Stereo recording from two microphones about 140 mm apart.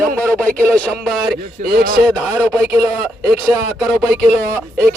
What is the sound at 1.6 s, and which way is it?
Speech, 90° right.